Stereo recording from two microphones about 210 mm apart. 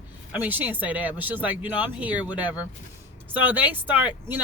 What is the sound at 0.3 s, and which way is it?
Speech, 10° right (ahead or behind).